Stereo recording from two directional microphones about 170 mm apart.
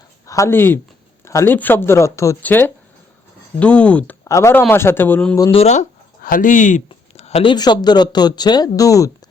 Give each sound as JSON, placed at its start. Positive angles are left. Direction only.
{"t": 0.3, "sound": "speech", "side_deg": 15}
{"t": 5.4, "sound": "speech", "side_deg": 35}
{"t": 6.2, "sound": "speech", "side_deg": 55}